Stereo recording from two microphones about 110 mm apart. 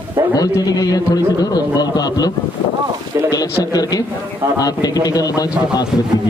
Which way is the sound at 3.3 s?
35° left (ahead or behind).